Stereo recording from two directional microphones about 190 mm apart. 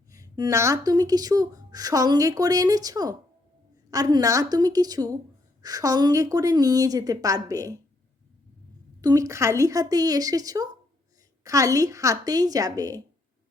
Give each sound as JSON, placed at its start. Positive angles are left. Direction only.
{"t": 0.1, "sound": "speech", "side_deg": -20}
{"t": 9.0, "sound": "speech", "side_deg": -20}